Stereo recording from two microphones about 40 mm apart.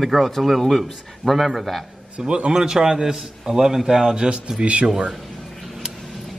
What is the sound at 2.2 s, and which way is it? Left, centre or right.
A man's voice, right.